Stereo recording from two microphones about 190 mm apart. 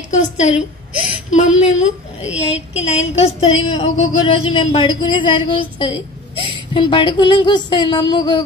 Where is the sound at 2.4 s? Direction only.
35° left (ahead or behind).